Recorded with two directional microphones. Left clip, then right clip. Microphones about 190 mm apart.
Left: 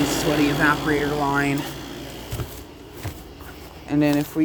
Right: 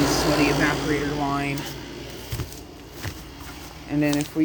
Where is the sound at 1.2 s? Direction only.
30° left (ahead or behind).